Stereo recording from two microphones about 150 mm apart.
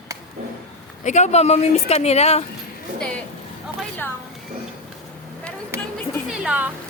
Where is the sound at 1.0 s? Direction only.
50° left (ahead or behind).